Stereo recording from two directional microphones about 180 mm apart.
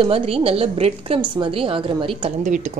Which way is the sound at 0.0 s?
30° right (ahead or behind).